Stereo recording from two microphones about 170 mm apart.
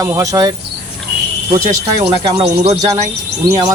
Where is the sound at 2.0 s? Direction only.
30° right (ahead or behind).